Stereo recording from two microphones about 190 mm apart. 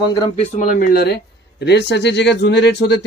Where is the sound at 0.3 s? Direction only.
40° left (ahead or behind).